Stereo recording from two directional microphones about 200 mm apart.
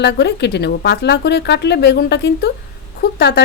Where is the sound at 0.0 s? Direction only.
55° left (ahead or behind).